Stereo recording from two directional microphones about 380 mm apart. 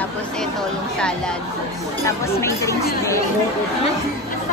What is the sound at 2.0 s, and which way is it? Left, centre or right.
Speech, centre.